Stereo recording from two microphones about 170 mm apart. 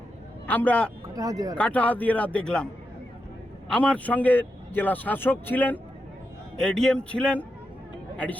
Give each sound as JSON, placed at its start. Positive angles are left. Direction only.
{"t": 0.4, "sound": "a man's voice", "side_deg": 10}
{"t": 1.1, "sound": "speech", "side_deg": -20}
{"t": 1.5, "sound": "a man's voice", "side_deg": 5}
{"t": 3.7, "sound": "a man's voice", "side_deg": 5}